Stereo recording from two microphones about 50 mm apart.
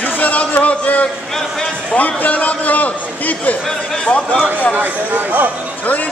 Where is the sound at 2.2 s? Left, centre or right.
Left.